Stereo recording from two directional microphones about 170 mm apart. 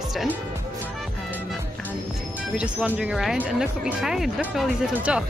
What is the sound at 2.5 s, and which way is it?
Speech, 5° right (ahead or behind).